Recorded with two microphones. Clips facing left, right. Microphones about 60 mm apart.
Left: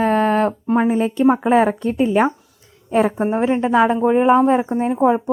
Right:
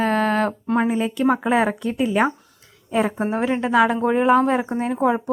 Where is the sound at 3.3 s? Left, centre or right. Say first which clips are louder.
Left 1 dB; left.